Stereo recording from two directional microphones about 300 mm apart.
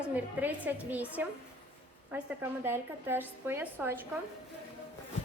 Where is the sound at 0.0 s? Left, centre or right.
Centre.